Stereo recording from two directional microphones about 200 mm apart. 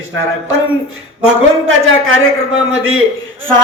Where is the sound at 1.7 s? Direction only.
90° right.